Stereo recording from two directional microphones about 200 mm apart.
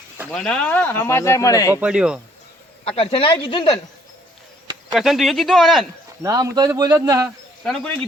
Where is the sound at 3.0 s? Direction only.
25° left (ahead or behind).